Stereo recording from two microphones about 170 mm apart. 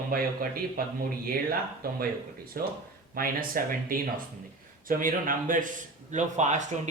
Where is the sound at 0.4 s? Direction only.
60° right (ahead or behind).